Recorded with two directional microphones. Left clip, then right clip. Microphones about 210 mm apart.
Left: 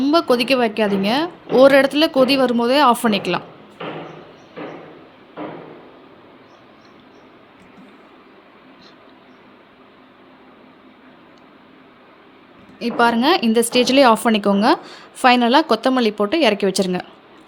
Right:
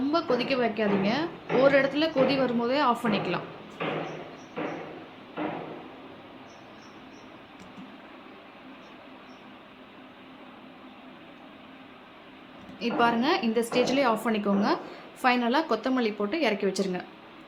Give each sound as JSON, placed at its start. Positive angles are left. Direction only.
{"t": 0.0, "sound": "a woman's voice", "side_deg": 55}
{"t": 12.8, "sound": "a woman's voice", "side_deg": 45}